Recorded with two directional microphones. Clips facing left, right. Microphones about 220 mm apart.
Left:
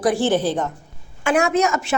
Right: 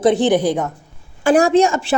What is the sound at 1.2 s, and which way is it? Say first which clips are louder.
Speech: right 5 dB; 35° right (ahead or behind).